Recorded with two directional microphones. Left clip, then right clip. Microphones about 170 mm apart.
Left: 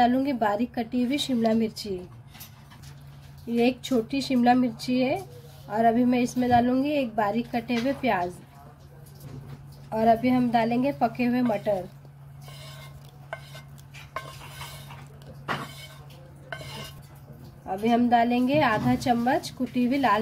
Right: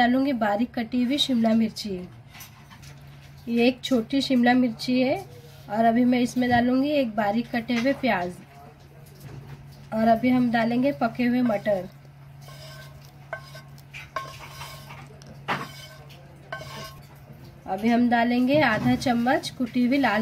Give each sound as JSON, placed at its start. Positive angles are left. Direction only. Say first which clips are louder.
{"t": 0.0, "sound": "a woman's voice", "louder": "even", "side_deg": -20}
{"t": 3.4, "sound": "a woman's voice", "louder": "right 2 dB", "side_deg": -15}
{"t": 9.8, "sound": "a woman's voice", "louder": "even", "side_deg": -15}
{"t": 17.6, "sound": "a woman's voice", "louder": "even", "side_deg": -20}